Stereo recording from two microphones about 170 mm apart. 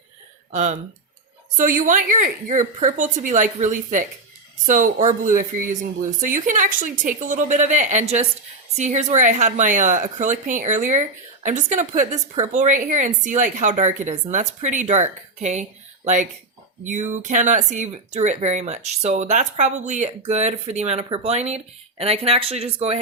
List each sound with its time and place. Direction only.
0.5 s a woman's voice: 45° right (ahead or behind)
16.8 s speech: 45° right (ahead or behind)